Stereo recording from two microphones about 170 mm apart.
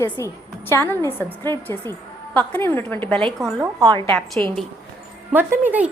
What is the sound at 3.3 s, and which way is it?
Speech, 20° right (ahead or behind).